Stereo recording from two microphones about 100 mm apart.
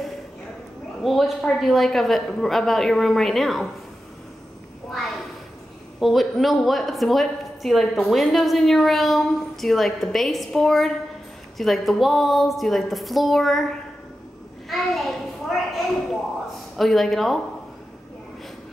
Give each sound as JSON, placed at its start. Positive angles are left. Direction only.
{"t": 1.0, "sound": "a woman's voice", "side_deg": 0}
{"t": 5.9, "sound": "a woman's voice", "side_deg": 0}
{"t": 14.7, "sound": "children playing", "side_deg": 0}
{"t": 16.7, "sound": "a woman's voice", "side_deg": 0}